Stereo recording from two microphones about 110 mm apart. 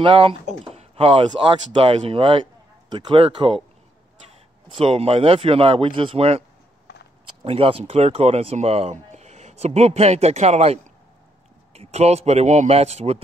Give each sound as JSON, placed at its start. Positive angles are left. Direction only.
{"t": 0.0, "sound": "speech", "side_deg": -55}
{"t": 4.7, "sound": "speech", "side_deg": -60}
{"t": 7.4, "sound": "speech", "side_deg": -60}
{"t": 9.1, "sound": "a man's voice", "side_deg": -90}